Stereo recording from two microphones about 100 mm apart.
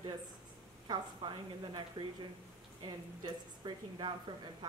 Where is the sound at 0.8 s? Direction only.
50° right (ahead or behind).